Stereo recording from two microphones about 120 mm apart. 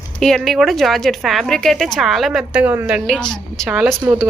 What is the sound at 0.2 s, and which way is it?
A woman's voice, 5° left (ahead or behind).